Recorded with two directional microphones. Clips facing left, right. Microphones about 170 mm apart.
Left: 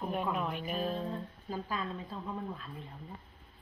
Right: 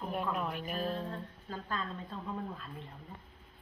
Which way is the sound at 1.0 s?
10° left (ahead or behind).